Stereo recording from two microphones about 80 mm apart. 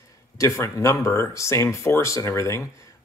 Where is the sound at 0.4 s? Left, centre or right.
Left.